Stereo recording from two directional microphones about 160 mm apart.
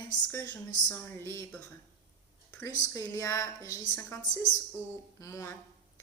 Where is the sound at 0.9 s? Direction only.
15° left (ahead or behind).